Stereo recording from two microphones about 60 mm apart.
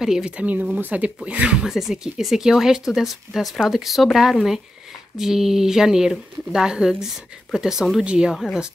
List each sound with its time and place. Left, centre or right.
0.0 s speech: centre
0.4 s speech: right
1.6 s speech: centre